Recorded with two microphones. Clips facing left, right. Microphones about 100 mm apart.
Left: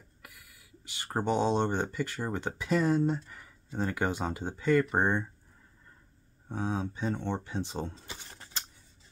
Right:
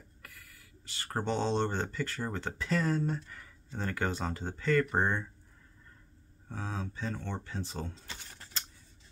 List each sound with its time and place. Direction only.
0.2 s speech: 15° left (ahead or behind)
6.5 s speech: 20° left (ahead or behind)